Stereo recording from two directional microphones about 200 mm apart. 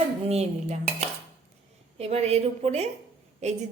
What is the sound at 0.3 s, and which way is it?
A woman's voice, 30° right (ahead or behind).